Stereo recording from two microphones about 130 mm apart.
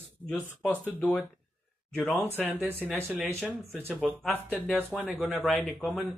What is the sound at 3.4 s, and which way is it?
Speech, 5° left (ahead or behind).